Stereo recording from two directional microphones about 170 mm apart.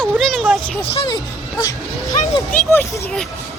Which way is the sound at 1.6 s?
20° left (ahead or behind).